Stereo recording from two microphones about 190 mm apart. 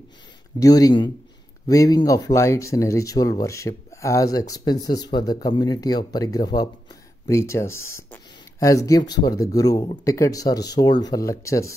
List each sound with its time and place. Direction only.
0.6 s speech: 20° left (ahead or behind)